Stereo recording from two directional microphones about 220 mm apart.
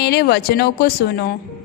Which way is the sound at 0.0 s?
45° left (ahead or behind).